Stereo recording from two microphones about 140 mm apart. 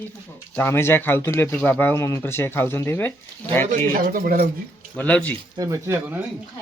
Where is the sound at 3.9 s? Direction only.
80° right.